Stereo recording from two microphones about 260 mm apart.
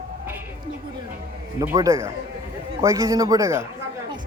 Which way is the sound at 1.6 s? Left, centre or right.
Centre.